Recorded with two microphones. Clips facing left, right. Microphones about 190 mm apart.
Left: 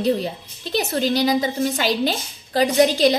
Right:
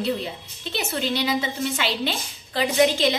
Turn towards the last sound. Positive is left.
turn(degrees=35)  # may be behind; listen again after turning